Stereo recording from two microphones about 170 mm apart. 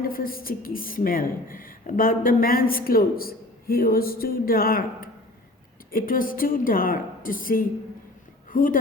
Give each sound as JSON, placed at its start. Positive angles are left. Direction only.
{"t": 0.0, "sound": "a woman's voice", "side_deg": 55}